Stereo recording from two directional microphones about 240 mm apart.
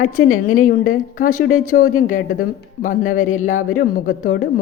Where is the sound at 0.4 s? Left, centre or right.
Left.